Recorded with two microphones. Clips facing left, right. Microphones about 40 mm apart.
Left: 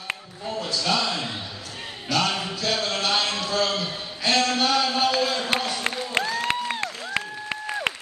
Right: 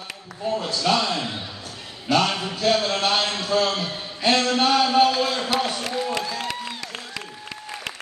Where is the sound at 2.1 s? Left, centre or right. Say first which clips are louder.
Right 3 dB; right; by 5.5 s centre.